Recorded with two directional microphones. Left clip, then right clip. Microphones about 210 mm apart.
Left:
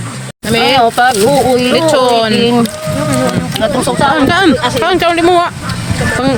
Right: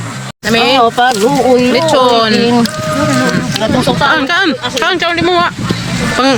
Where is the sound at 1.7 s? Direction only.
Centre (ahead or behind).